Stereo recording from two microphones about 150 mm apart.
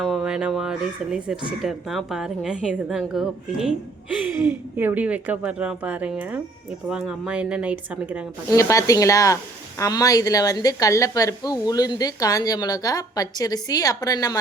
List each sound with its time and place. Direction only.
0.0 s a woman's voice: centre (ahead or behind)
8.4 s speech: 20° left (ahead or behind)